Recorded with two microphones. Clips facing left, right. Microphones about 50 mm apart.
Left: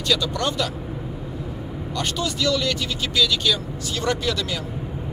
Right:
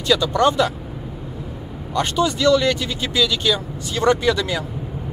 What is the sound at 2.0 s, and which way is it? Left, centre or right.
Speech, right.